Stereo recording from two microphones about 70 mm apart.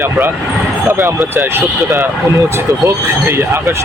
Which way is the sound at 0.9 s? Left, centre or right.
Right.